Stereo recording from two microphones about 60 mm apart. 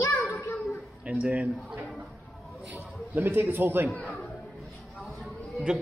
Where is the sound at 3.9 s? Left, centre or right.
Left.